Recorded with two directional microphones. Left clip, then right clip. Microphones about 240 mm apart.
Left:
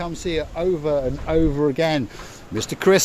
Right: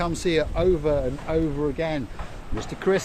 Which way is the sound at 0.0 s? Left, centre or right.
Centre.